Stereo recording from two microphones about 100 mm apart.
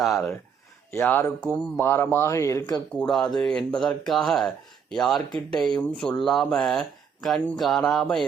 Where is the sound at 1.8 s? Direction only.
25° left (ahead or behind).